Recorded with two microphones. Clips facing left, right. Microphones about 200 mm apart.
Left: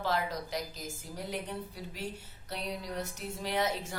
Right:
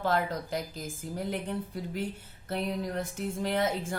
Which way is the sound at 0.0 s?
55° right (ahead or behind).